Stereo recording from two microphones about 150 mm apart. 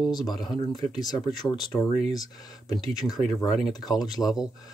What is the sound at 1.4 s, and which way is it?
Speech, 30° left (ahead or behind).